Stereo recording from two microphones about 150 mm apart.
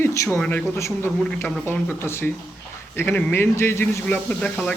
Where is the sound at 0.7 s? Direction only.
20° left (ahead or behind).